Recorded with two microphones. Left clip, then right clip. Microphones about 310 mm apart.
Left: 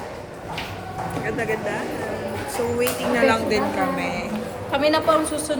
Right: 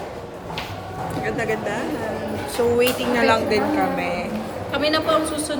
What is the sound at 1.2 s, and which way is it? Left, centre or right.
Speech, centre.